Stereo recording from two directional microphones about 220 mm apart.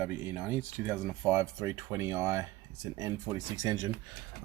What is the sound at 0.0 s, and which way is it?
Speech, 10° right (ahead or behind).